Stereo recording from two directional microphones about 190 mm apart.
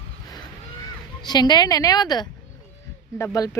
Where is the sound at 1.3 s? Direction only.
20° left (ahead or behind).